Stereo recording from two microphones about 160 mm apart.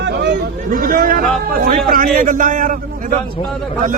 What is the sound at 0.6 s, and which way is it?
A man's voice, 60° right (ahead or behind).